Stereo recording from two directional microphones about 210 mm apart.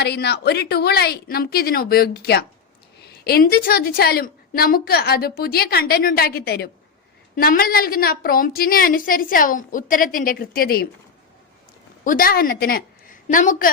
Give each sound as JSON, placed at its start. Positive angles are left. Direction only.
{"t": 0.0, "sound": "a woman's voice", "side_deg": 50}
{"t": 12.0, "sound": "a woman's voice", "side_deg": 40}